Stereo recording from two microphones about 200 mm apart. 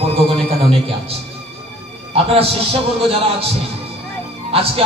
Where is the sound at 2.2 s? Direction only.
30° right (ahead or behind).